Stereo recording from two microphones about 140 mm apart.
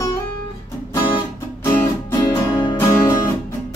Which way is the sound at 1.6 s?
15° left (ahead or behind).